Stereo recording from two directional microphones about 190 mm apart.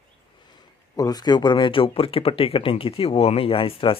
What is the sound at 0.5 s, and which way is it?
Speech, 20° left (ahead or behind).